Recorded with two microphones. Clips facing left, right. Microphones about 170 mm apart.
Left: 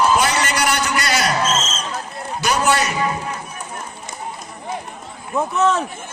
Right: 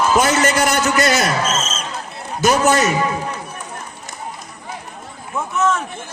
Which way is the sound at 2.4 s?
45° right (ahead or behind).